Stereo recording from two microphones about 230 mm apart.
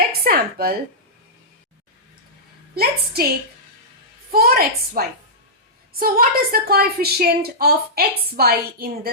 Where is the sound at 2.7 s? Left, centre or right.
Right.